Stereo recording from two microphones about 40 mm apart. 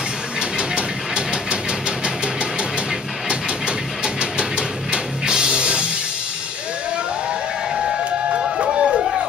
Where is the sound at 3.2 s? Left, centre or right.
Right.